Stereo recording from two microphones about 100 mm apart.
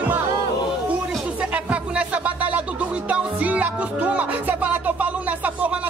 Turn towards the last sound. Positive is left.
turn(degrees=-15)  # may be behind; listen again after turning